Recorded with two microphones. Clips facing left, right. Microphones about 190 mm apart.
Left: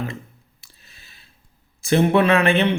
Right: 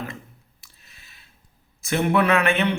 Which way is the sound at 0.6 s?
30° left (ahead or behind).